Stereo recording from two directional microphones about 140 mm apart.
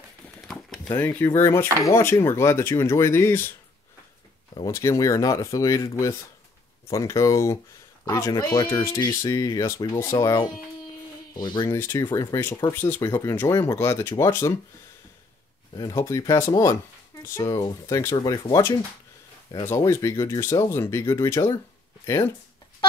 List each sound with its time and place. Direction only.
0.4 s a sound: centre (ahead or behind)
0.9 s speech: 15° left (ahead or behind)
4.6 s speech: 20° left (ahead or behind)
11.6 s speech: 15° left (ahead or behind)
12.0 s speech: 30° left (ahead or behind)
12.7 s speech: 15° left (ahead or behind)
15.7 s speech: 30° left (ahead or behind)
16.0 s speech: 20° left (ahead or behind)
19.7 s speech: 20° left (ahead or behind)